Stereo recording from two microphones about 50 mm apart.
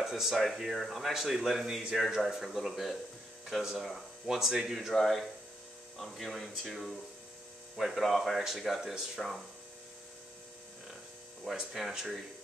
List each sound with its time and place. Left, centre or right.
0.0 s speech: centre
4.7 s speech: centre
11.4 s speech: centre